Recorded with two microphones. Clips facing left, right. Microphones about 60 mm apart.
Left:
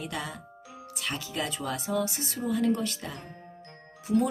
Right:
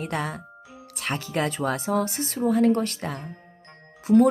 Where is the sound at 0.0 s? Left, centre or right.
Right.